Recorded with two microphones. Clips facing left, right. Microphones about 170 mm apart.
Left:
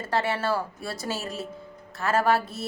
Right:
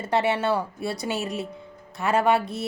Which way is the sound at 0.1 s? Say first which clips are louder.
Right 3 dB; 20° right (ahead or behind).